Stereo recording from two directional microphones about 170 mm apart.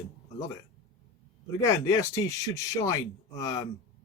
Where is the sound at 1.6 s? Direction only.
20° left (ahead or behind).